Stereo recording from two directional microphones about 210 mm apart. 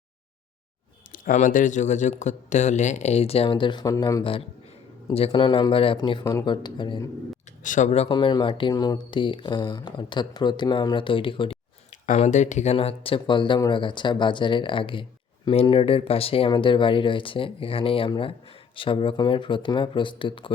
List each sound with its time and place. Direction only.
1.1 s speech: 40° left (ahead or behind); by 7.1 s 20° left (ahead or behind)
7.6 s speech: 35° left (ahead or behind)